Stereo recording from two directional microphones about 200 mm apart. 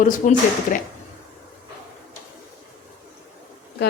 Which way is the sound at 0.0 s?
40° left (ahead or behind).